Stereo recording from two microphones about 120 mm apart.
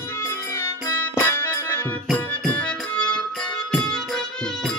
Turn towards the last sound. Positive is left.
turn(degrees=5)  # may be behind; listen again after turning